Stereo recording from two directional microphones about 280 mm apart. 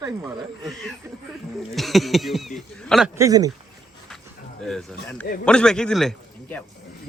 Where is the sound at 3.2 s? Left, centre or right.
Centre.